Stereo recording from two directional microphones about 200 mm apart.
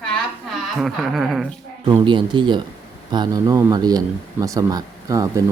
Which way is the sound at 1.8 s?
25° right (ahead or behind).